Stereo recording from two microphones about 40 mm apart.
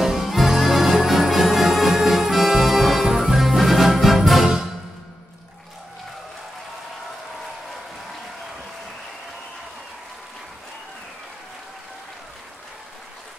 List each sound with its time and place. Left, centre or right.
0.0 s music: centre